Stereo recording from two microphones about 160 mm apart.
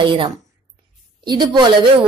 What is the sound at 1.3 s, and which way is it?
Speech, 30° right (ahead or behind).